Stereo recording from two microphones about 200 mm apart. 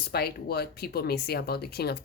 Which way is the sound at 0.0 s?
50° left (ahead or behind).